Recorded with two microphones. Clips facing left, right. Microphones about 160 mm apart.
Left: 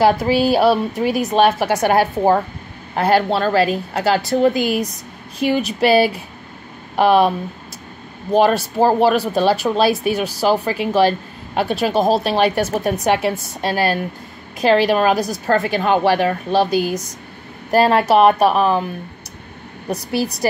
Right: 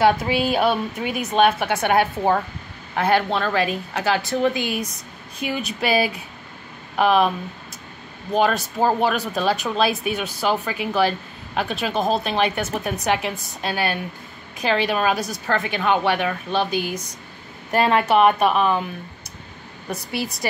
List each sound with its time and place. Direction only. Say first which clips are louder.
0.0 s speech: left 4 dB; 35° left (ahead or behind)
19.9 s speech: left 6 dB; 40° left (ahead or behind)